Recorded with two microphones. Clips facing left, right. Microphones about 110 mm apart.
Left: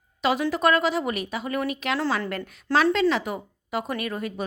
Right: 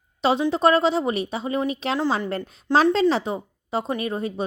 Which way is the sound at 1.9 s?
15° right (ahead or behind).